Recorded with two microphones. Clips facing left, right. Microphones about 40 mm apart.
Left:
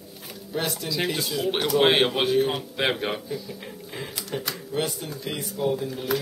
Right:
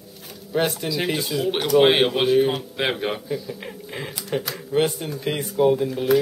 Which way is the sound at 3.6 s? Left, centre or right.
Right.